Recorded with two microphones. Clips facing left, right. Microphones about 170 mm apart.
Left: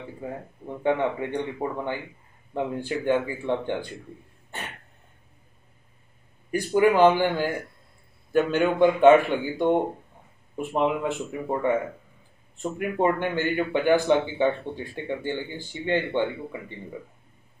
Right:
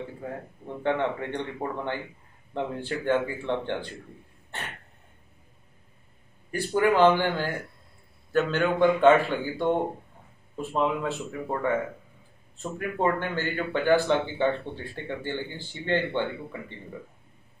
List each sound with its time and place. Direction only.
0.8 s a man's voice: 10° left (ahead or behind)
6.5 s a man's voice: 15° left (ahead or behind)